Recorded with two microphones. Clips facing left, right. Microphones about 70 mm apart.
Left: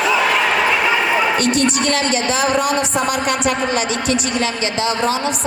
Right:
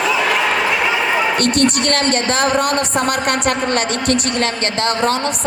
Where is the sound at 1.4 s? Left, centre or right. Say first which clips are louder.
Right 1 dB; right.